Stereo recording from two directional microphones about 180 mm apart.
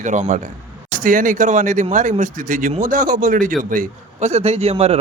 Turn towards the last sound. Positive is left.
turn(degrees=-35)  # may be behind; listen again after turning